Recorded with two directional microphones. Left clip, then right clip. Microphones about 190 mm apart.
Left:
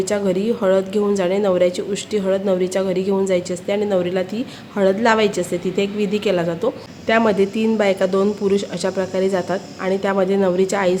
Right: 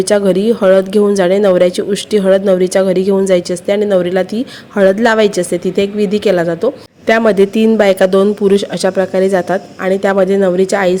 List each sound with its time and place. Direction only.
0.0 s speech: 35° right (ahead or behind)